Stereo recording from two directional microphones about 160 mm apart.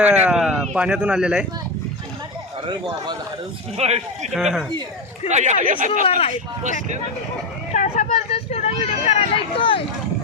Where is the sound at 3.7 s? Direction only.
40° right (ahead or behind).